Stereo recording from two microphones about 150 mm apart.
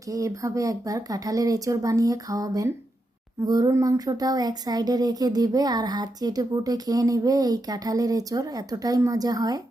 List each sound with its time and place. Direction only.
0.1 s speech: 20° right (ahead or behind)